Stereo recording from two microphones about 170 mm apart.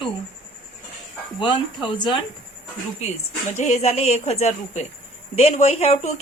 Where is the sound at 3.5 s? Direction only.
40° left (ahead or behind).